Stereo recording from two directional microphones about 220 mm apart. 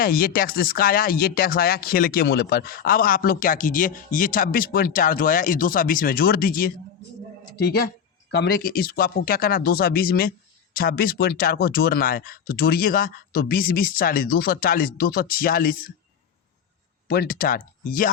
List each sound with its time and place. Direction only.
0.0 s speech: 40° left (ahead or behind)
17.1 s speech: 45° left (ahead or behind)